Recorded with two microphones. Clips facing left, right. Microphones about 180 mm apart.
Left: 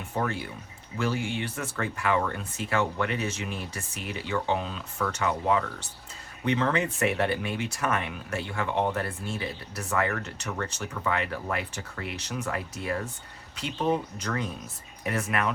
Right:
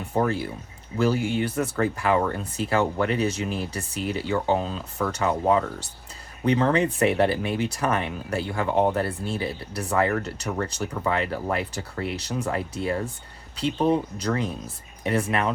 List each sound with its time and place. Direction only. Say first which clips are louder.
0.1 s speech: right 6 dB; 35° right (ahead or behind)